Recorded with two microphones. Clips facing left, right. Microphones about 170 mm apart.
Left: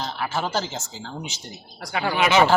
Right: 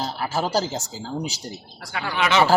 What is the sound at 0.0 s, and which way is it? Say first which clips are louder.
Speech: right 2 dB; 35° right (ahead or behind).